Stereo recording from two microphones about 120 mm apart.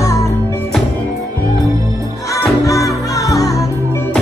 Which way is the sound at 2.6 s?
30° left (ahead or behind).